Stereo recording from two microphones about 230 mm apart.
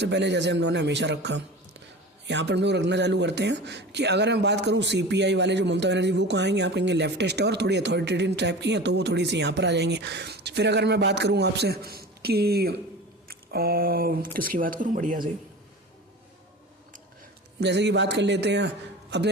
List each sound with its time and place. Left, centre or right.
0.0 s a man's voice: right
17.6 s a man's voice: right